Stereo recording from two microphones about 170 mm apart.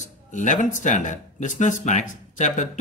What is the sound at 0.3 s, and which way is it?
Speech, 50° left (ahead or behind).